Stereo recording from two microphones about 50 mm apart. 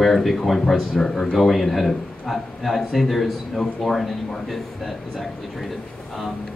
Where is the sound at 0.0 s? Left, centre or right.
Centre.